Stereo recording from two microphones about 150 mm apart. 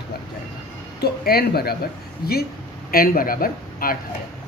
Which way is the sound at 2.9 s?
80° left.